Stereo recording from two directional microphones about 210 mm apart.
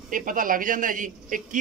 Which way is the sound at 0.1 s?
40° right (ahead or behind).